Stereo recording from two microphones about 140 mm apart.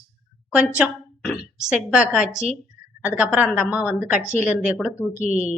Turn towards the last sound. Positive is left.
turn(degrees=-55)  # may be behind; listen again after turning